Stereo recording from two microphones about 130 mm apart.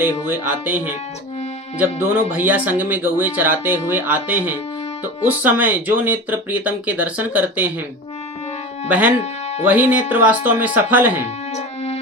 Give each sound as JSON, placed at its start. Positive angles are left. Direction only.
{"t": 0.0, "sound": "speech", "side_deg": -15}
{"t": 2.3, "sound": "speech", "side_deg": -15}
{"t": 8.9, "sound": "speech", "side_deg": -10}
{"t": 9.1, "sound": "speech", "side_deg": 60}
{"t": 9.6, "sound": "speech", "side_deg": -10}
{"t": 11.5, "sound": "music", "side_deg": 55}